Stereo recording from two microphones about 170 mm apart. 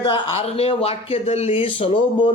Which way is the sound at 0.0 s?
35° left (ahead or behind).